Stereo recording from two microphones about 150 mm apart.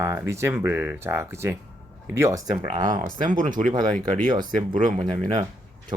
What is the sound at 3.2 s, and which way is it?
Speech, 60° right (ahead or behind).